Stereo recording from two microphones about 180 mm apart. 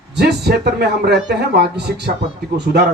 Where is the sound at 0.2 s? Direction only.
65° right (ahead or behind).